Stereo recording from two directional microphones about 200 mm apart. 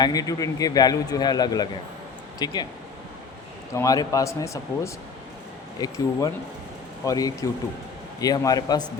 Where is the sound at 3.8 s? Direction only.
15° left (ahead or behind).